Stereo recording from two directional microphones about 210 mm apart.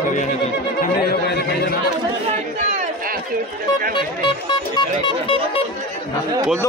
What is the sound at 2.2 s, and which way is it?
Chatter, 35° right (ahead or behind).